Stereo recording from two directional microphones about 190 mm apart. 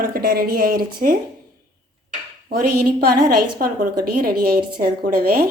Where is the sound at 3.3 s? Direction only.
50° right (ahead or behind).